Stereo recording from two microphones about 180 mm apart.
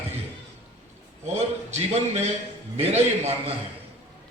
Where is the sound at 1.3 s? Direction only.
40° right (ahead or behind).